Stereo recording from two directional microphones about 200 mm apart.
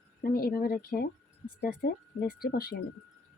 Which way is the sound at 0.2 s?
45° left (ahead or behind).